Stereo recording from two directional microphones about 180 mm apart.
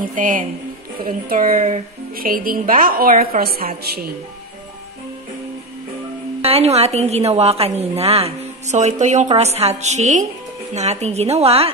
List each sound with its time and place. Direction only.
0.0 s a woman's voice: 45° right (ahead or behind)
6.4 s a woman's voice: 35° right (ahead or behind)